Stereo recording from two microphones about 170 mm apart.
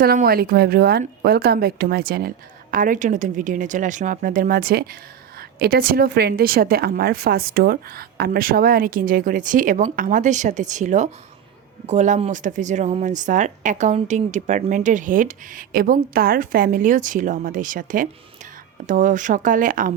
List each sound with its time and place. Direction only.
0.0 s a woman's voice: 65° right (ahead or behind)